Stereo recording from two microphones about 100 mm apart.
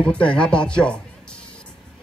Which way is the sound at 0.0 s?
10° left (ahead or behind).